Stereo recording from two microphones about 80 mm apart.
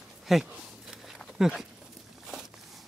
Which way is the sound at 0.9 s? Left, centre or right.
Centre.